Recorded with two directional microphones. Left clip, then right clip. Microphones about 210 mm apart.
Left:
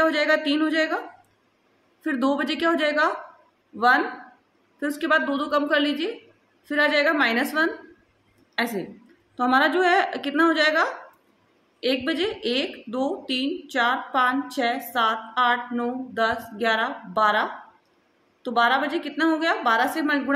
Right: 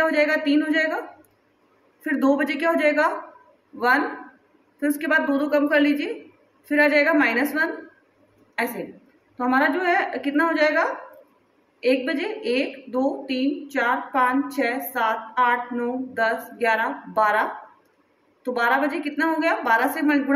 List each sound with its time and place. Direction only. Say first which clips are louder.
0.0 s a woman's voice: even; 20° left (ahead or behind)
2.0 s a woman's voice: right 3 dB; 20° left (ahead or behind)
4.7 s a woman's voice: right 1 dB; 20° left (ahead or behind)
9.4 s a woman's voice: left 1 dB; 25° left (ahead or behind)